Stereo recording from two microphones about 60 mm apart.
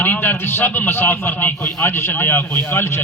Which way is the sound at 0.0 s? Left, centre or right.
Left.